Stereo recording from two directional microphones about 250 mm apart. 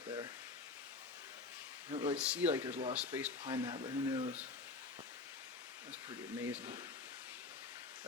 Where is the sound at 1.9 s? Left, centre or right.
Right.